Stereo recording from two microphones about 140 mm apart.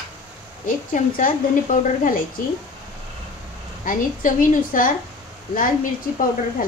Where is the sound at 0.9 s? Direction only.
75° left (ahead or behind).